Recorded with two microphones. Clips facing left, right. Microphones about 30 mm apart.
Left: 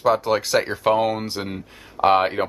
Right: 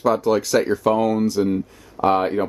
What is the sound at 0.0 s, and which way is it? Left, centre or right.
Speech, left.